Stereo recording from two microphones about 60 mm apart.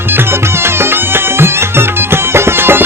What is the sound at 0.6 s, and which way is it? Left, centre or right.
Music, right.